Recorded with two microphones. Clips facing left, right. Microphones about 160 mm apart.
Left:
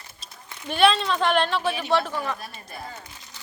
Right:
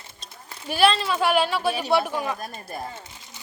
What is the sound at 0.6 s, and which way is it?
Speech, 5° right (ahead or behind).